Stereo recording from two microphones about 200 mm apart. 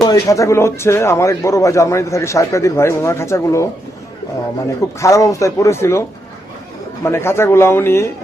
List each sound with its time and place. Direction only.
0.0 s speech: 15° left (ahead or behind)
4.9 s speech: 15° left (ahead or behind)
7.0 s speech: 10° left (ahead or behind)